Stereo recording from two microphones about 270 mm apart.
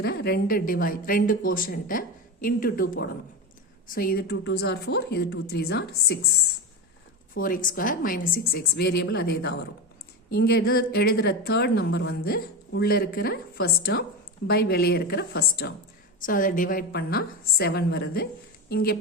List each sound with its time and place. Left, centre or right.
0.0 s a woman's voice: left
7.3 s a woman's voice: left